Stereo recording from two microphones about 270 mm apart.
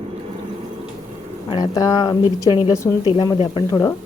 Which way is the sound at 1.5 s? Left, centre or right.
Centre.